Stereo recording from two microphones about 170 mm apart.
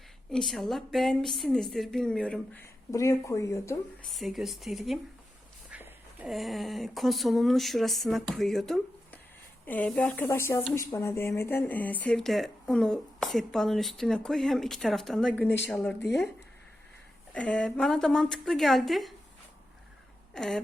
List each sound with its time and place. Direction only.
0.3 s speech: centre (ahead or behind)
2.9 s speech: 20° left (ahead or behind)
4.0 s speech: centre (ahead or behind)
17.3 s speech: 5° left (ahead or behind)
20.3 s speech: centre (ahead or behind)